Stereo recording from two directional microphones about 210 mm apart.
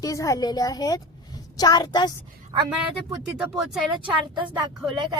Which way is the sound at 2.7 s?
5° right (ahead or behind).